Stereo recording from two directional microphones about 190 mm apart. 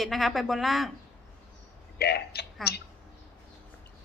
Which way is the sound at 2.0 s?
55° left (ahead or behind).